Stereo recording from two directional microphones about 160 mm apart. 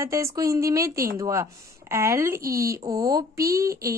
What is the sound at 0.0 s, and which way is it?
Speech, 20° right (ahead or behind).